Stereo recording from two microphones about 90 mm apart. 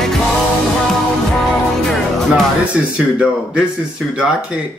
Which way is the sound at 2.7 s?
10° right (ahead or behind).